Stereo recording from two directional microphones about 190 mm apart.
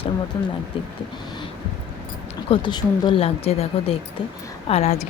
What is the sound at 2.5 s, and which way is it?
Speech, 25° left (ahead or behind).